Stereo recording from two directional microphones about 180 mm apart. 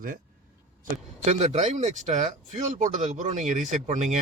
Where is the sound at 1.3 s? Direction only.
40° right (ahead or behind).